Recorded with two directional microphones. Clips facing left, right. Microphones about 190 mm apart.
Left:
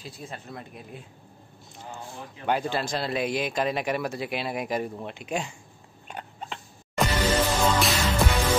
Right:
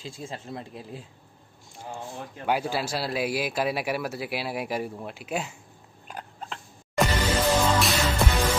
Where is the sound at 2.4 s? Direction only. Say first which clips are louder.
Even; 10° right (ahead or behind).